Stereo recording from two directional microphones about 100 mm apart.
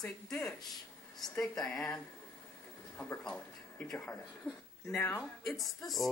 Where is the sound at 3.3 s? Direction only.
15° left (ahead or behind).